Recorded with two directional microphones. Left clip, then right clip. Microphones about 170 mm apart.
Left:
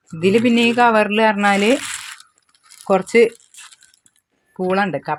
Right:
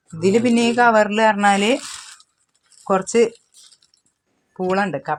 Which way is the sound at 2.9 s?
20° left (ahead or behind).